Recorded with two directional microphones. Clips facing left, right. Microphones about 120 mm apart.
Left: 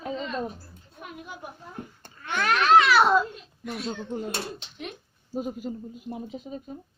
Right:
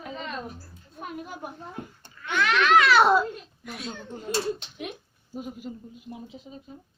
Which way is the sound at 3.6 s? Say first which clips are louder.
Left 5 dB; centre (ahead or behind).